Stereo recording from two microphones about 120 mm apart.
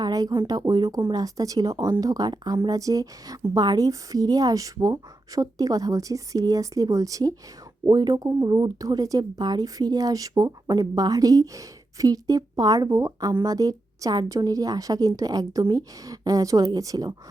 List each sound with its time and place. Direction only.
0.0 s speech: 30° right (ahead or behind)